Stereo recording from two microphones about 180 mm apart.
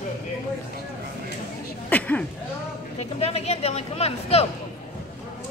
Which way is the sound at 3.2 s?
35° left (ahead or behind).